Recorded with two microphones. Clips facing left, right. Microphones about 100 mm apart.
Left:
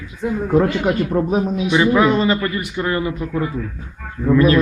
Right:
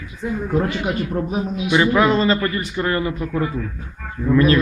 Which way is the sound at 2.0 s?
15° left (ahead or behind).